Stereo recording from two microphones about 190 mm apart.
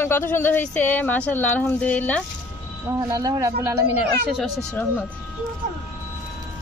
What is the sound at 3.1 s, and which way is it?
Speech, 20° right (ahead or behind).